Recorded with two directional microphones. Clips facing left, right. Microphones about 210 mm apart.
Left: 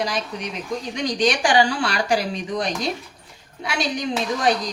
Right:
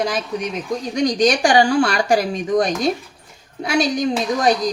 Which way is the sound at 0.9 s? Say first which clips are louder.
Right 5 dB; 45° right (ahead or behind).